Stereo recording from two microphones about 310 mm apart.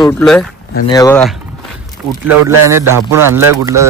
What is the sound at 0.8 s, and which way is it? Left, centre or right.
Speech, centre.